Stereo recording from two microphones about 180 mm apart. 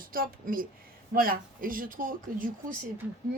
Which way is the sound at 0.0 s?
50° right (ahead or behind).